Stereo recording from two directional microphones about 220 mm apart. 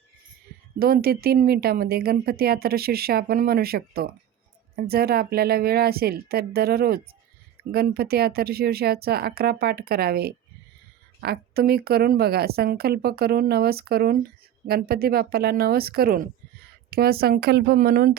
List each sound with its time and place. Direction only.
0.8 s speech: 45° right (ahead or behind)